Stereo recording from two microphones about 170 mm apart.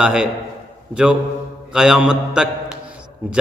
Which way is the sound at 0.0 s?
5° right (ahead or behind).